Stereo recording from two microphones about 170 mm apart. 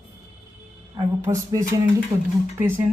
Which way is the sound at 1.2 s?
20° right (ahead or behind).